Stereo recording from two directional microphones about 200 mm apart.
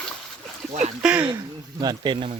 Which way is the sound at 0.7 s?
35° right (ahead or behind).